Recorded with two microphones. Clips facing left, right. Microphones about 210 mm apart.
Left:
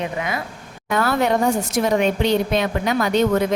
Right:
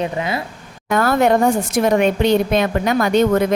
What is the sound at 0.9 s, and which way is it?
A woman's voice, 50° right (ahead or behind).